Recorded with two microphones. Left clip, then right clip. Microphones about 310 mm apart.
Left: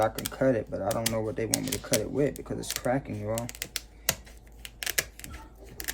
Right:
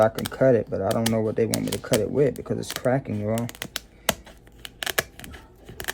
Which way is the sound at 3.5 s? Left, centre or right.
Centre.